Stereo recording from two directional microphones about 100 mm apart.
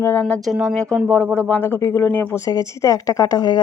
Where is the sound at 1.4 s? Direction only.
20° left (ahead or behind).